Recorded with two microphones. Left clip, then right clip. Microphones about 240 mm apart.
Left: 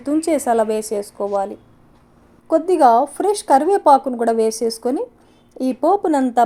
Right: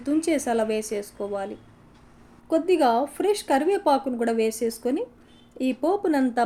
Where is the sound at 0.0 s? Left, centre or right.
Centre.